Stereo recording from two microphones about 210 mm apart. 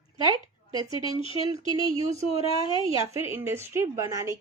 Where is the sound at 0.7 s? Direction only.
20° right (ahead or behind).